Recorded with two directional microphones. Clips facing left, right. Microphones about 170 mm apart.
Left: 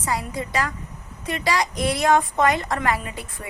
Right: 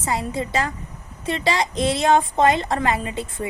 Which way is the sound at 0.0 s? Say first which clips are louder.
Right 2 dB; 25° right (ahead or behind).